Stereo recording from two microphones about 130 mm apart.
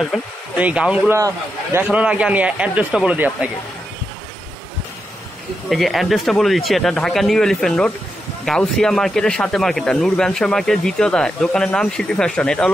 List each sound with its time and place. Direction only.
0.1 s speech: centre (ahead or behind)
5.7 s speech: centre (ahead or behind)